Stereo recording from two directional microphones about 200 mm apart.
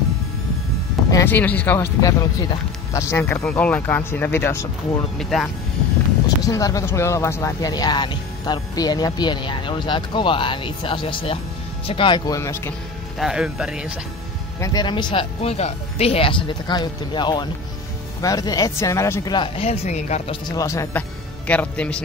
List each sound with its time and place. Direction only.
1.1 s speech: 10° left (ahead or behind)
5.2 s speech: centre (ahead or behind)
6.2 s speech: 15° left (ahead or behind)
13.2 s speech: 5° right (ahead or behind)
14.6 s speech: 20° left (ahead or behind)
20.4 s speech: 15° left (ahead or behind)